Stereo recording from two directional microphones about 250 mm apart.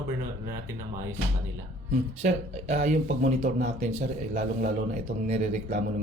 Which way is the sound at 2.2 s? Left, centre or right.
Right.